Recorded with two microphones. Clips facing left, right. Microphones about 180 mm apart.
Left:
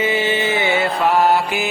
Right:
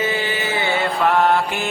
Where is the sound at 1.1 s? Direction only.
5° left (ahead or behind).